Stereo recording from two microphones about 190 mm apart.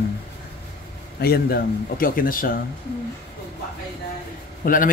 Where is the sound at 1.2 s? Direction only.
55° left (ahead or behind).